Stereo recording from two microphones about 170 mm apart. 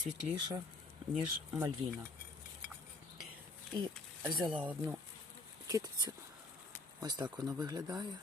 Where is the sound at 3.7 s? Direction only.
25° right (ahead or behind).